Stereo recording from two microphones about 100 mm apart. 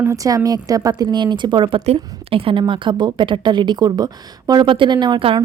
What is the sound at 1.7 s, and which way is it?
Speech, 90° right.